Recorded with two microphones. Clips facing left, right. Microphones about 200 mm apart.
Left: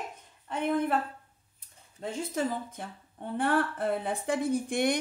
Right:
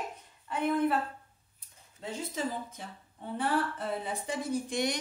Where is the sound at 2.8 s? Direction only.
55° left (ahead or behind).